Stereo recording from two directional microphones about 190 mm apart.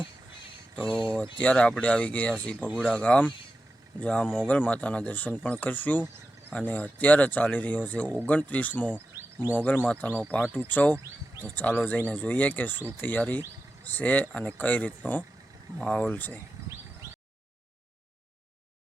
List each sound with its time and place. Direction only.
0.8 s speech: 5° left (ahead or behind)